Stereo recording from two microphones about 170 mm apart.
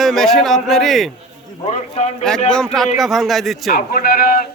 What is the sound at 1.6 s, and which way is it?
Speech, 40° left (ahead or behind).